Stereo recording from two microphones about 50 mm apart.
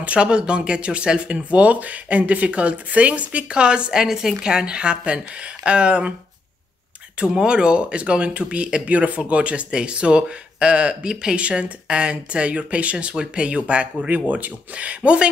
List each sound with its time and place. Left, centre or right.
0.0 s speech: right
7.2 s speech: centre